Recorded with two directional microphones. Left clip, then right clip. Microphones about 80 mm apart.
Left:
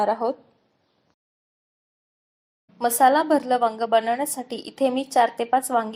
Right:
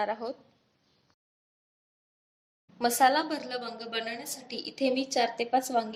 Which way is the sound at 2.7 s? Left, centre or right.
Left.